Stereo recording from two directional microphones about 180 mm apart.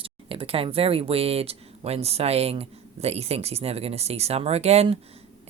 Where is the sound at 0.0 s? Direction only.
30° right (ahead or behind).